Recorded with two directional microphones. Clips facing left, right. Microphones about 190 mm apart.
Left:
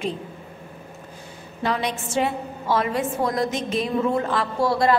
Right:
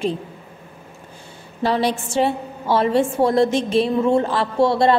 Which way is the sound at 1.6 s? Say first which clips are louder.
Right 5 dB; 30° right (ahead or behind).